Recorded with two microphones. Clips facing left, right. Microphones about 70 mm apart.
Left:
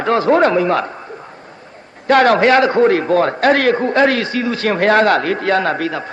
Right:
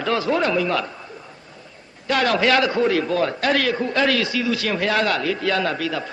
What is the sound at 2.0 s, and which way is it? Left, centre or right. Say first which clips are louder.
A man's voice: left 8 dB; left.